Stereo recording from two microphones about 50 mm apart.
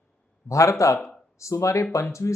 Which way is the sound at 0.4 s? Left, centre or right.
Left.